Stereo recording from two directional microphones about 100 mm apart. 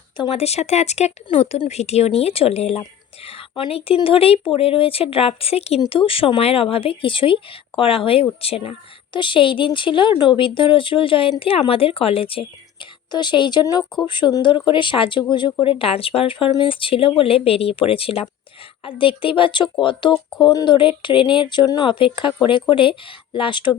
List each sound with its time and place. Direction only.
0.3 s speech: 90° left
3.7 s speech: 75° left (ahead or behind); by 5.8 s 90° left
5.9 s speech: 65° left (ahead or behind)
9.1 s speech: 55° left (ahead or behind)
13.1 s speech: 50° left (ahead or behind)
15.6 s speech: 65° left (ahead or behind)
20.4 s speech: 45° left (ahead or behind)
20.7 s speech: 55° left (ahead or behind)
21.8 s speech: 60° left (ahead or behind)